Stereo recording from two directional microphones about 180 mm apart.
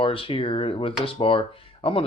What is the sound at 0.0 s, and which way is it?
Speech, 30° left (ahead or behind).